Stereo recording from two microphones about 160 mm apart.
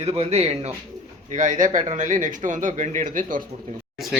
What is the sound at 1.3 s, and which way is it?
Speech, 55° right (ahead or behind).